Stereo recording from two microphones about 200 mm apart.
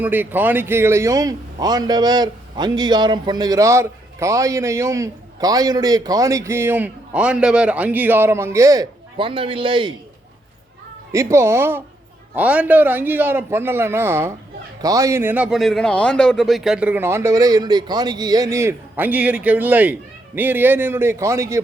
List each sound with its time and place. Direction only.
0.0 s speech: 10° right (ahead or behind); by 9.9 s 25° right (ahead or behind)
11.1 s speech: 15° right (ahead or behind)